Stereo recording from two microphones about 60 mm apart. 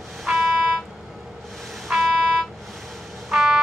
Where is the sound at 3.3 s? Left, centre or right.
Centre.